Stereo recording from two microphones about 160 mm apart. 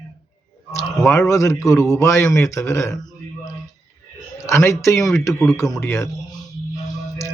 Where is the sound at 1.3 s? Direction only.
20° left (ahead or behind).